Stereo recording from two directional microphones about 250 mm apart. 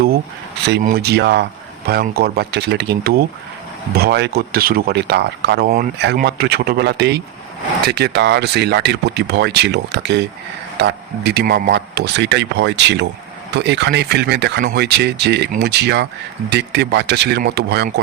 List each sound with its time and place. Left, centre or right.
0.7 s speech: right